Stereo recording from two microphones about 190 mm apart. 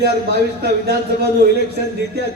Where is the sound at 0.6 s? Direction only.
55° right (ahead or behind).